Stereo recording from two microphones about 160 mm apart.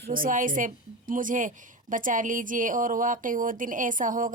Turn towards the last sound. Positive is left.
turn(degrees=-55)  # may be behind; listen again after turning